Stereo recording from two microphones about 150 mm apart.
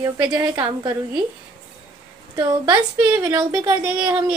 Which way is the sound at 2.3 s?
25° right (ahead or behind).